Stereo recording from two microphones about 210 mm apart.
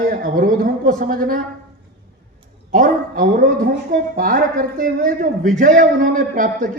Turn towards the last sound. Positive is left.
turn(degrees=-40)  # may be behind; listen again after turning